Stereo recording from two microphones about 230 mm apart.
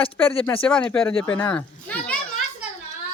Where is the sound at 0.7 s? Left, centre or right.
Centre.